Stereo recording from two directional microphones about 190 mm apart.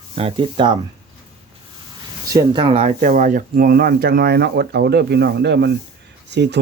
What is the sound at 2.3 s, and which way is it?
Speech, 25° right (ahead or behind).